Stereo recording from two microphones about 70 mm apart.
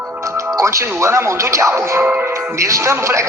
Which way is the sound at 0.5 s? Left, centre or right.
Right.